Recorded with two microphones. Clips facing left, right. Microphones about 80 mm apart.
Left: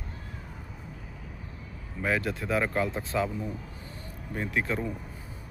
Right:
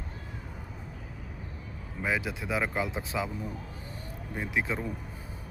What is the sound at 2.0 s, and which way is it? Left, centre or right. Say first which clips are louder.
Speech: left 2 dB; centre.